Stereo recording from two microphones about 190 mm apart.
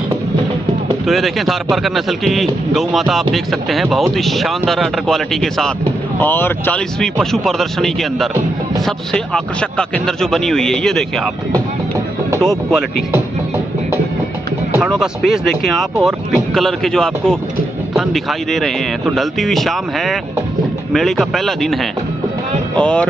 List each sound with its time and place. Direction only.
1.0 s a man's voice: centre (ahead or behind)
12.4 s a man's voice: centre (ahead or behind)
14.7 s a man's voice: 5° right (ahead or behind)
22.8 s a man's voice: 5° left (ahead or behind)